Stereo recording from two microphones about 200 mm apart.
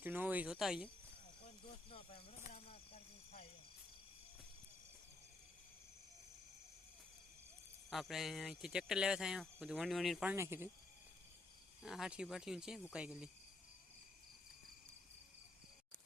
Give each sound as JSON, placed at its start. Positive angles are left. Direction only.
{"t": 0.0, "sound": "speech", "side_deg": -10}
{"t": 1.9, "sound": "a sound", "side_deg": 25}
{"t": 7.9, "sound": "speech", "side_deg": 0}
{"t": 11.8, "sound": "speech", "side_deg": 0}